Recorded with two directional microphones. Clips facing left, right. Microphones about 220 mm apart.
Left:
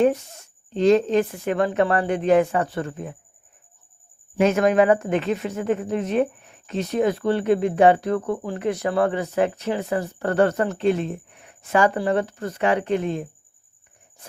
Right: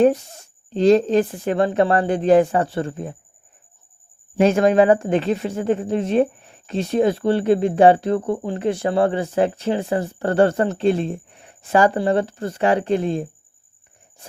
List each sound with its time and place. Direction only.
0.0 s speech: 35° right (ahead or behind)
4.4 s speech: 30° right (ahead or behind)